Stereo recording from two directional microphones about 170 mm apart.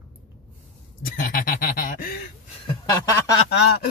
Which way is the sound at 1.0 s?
55° left (ahead or behind).